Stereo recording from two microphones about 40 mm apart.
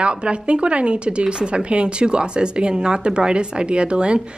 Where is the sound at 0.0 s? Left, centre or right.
Right.